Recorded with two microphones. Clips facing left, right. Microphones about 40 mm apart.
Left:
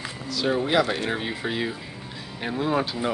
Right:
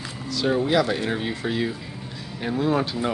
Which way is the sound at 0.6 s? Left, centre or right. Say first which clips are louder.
Right 1 dB; centre.